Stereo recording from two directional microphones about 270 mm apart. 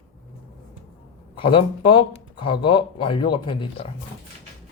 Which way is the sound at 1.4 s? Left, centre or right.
Centre.